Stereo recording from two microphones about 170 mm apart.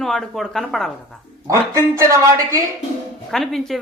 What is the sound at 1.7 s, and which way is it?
Speech, 15° right (ahead or behind).